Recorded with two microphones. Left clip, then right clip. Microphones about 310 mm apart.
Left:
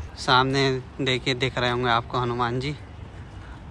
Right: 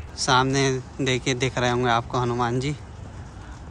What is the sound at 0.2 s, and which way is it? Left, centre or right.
Speech, centre.